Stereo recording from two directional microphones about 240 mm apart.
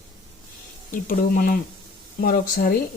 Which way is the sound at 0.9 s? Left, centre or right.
Left.